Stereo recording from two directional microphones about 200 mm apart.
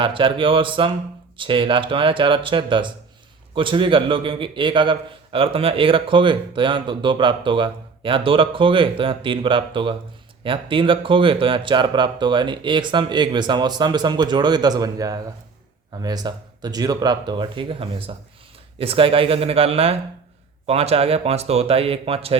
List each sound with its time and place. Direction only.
0.0 s a man's voice: 25° right (ahead or behind)